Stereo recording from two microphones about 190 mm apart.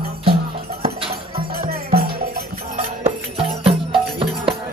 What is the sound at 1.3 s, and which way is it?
Music, 50° right (ahead or behind).